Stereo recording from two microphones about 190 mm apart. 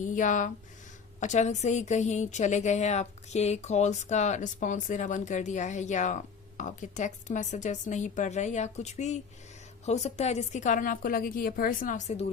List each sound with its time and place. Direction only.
0.0 s a woman's voice: 40° left (ahead or behind)